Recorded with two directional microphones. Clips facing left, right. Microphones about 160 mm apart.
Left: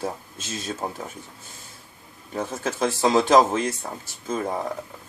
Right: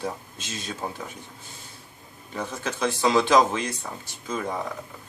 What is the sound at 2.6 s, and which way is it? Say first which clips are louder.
Speech: left 2 dB; 45° left (ahead or behind).